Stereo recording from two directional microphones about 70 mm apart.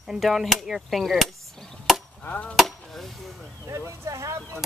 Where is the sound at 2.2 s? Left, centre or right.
Centre.